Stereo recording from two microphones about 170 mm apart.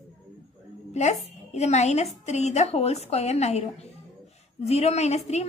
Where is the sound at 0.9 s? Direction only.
40° left (ahead or behind).